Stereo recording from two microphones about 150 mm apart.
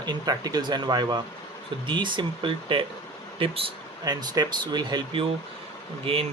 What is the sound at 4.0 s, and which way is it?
Speech, 25° right (ahead or behind).